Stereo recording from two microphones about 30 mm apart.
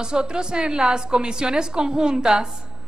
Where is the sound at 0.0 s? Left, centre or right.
Right.